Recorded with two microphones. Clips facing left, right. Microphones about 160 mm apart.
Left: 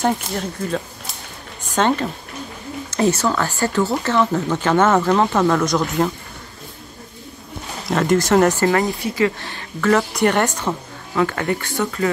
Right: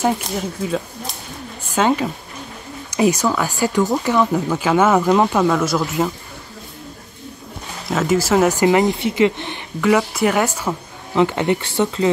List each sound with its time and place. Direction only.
0.0 s speech: 5° right (ahead or behind)
7.9 s speech: 5° right (ahead or behind)
11.1 s speech: 20° right (ahead or behind)